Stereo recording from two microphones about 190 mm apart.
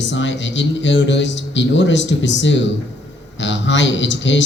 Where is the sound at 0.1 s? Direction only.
70° left (ahead or behind).